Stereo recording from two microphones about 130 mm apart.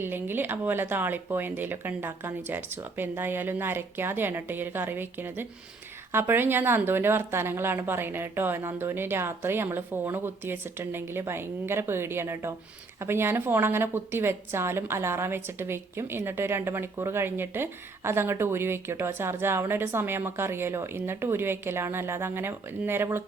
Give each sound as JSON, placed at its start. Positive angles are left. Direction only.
{"t": 0.0, "sound": "a woman's voice", "side_deg": -15}